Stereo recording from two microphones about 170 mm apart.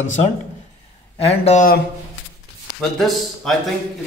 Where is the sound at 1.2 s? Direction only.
35° left (ahead or behind).